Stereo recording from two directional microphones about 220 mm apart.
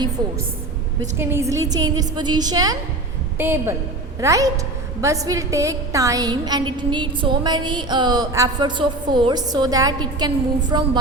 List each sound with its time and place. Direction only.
1.2 s a woman's voice: 10° right (ahead or behind)